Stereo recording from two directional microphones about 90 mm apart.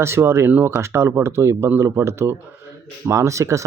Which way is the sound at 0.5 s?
15° right (ahead or behind).